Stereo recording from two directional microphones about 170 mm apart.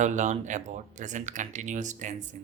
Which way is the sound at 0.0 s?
45° right (ahead or behind).